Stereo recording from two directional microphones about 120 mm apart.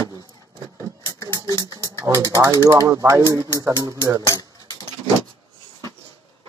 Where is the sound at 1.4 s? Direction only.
30° right (ahead or behind).